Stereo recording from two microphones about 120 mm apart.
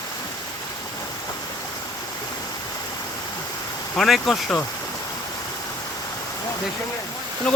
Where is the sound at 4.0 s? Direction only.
Centre (ahead or behind).